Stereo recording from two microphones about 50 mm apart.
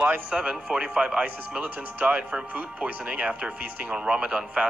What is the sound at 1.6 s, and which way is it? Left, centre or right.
Speech, right.